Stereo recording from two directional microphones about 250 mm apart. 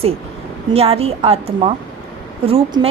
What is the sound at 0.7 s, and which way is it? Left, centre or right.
Speech, right.